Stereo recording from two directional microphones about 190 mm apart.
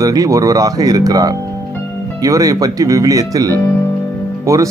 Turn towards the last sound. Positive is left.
turn(degrees=-15)  # may be behind; listen again after turning